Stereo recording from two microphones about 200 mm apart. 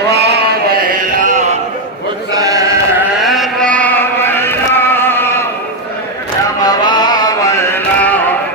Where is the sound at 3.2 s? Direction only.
Centre (ahead or behind).